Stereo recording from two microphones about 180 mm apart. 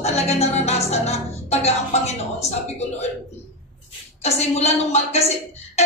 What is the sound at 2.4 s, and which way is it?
Speech, 35° left (ahead or behind).